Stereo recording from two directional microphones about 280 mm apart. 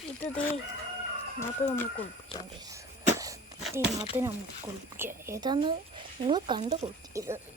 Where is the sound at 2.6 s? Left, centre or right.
Centre.